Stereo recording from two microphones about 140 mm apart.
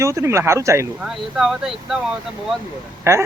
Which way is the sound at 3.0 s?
20° right (ahead or behind).